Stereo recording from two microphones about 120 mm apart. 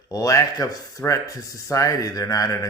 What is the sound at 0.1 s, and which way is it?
Speech, 25° left (ahead or behind).